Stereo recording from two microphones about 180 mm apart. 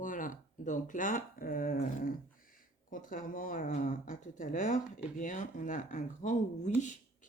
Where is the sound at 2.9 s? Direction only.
50° left (ahead or behind).